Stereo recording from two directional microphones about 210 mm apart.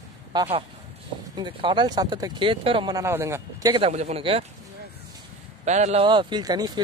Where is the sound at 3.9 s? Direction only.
30° right (ahead or behind).